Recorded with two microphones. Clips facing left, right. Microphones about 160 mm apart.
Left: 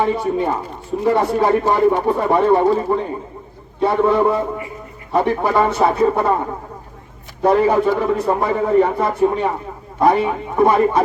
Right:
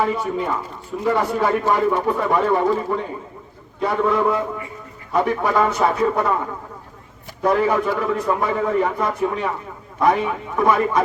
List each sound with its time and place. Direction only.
0.0 s a man's voice: 35° left (ahead or behind)
7.4 s a man's voice: 35° left (ahead or behind)